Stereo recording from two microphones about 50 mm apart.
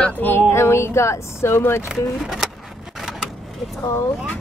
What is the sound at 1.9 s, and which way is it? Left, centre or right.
Speech, centre.